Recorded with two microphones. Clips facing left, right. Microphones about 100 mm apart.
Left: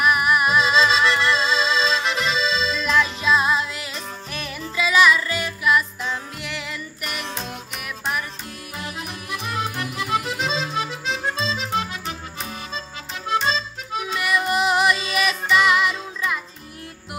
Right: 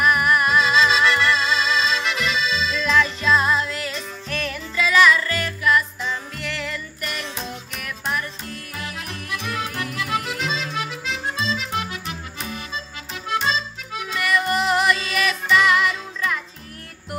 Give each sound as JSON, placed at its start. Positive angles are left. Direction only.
{"t": 0.0, "sound": "music", "side_deg": 10}
{"t": 2.8, "sound": "music", "side_deg": 10}
{"t": 13.3, "sound": "accordion", "side_deg": 25}
{"t": 14.1, "sound": "music", "side_deg": 15}